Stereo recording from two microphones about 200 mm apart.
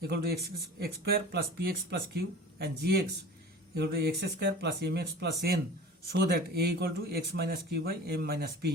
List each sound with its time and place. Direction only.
0.1 s speech: 50° right (ahead or behind)